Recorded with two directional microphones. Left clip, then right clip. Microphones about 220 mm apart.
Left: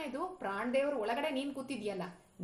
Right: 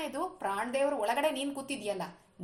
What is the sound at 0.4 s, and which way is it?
A woman's voice, 25° right (ahead or behind).